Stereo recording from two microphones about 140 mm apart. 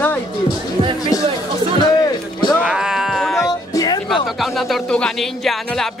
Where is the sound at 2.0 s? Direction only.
25° left (ahead or behind).